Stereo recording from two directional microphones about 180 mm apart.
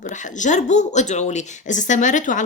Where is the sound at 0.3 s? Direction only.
40° left (ahead or behind).